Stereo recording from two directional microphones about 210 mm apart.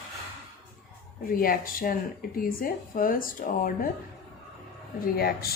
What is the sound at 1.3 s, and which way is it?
Speech, 40° left (ahead or behind).